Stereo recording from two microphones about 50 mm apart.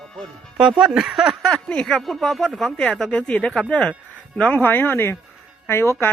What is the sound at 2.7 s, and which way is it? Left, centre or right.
Speech, left.